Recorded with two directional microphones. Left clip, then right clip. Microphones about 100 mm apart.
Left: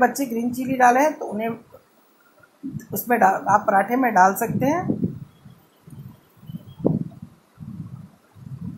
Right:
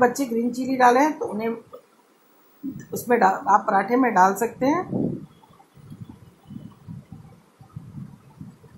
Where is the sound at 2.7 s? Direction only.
20° left (ahead or behind).